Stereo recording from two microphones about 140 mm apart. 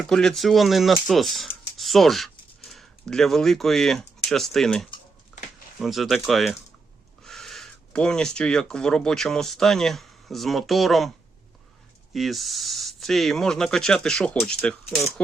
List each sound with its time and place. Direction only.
0.0 s speech: 5° left (ahead or behind)
5.3 s a sound: 5° right (ahead or behind)
5.8 s speech: centre (ahead or behind)
12.1 s speech: centre (ahead or behind)